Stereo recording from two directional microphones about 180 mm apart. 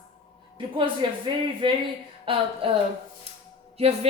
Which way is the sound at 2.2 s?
30° right (ahead or behind).